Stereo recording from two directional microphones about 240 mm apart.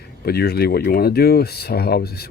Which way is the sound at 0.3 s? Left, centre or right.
Left.